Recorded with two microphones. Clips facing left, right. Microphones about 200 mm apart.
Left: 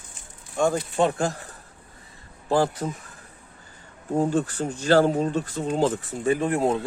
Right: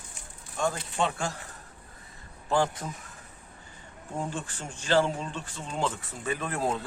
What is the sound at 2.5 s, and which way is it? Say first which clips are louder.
Speech: left 5 dB; 35° left (ahead or behind).